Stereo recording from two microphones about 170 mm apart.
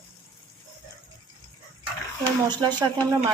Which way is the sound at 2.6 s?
25° right (ahead or behind).